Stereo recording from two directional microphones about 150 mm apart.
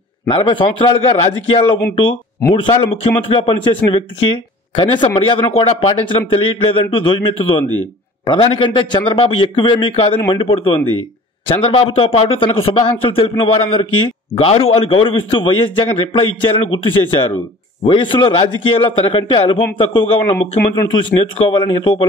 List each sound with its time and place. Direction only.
0.3 s a man's voice: 35° left (ahead or behind)
2.8 s a man's voice: 40° left (ahead or behind)